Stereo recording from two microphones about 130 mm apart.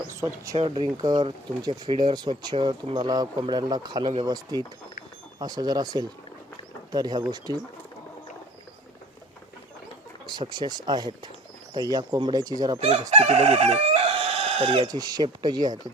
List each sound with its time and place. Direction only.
0.1 s speech: 20° right (ahead or behind)
0.5 s speech: 45° right (ahead or behind)
10.5 s speech: 35° right (ahead or behind)
12.8 s chicken: 55° right (ahead or behind)
14.8 s speech: 30° right (ahead or behind)